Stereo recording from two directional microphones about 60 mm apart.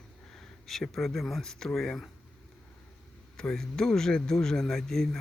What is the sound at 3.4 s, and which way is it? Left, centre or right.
Speech, centre.